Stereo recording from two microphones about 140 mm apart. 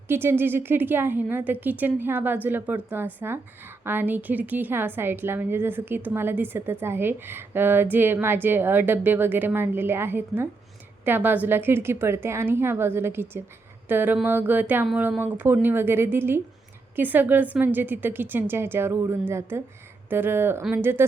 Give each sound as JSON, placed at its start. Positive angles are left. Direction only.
{"t": 0.1, "sound": "a woman's voice", "side_deg": -15}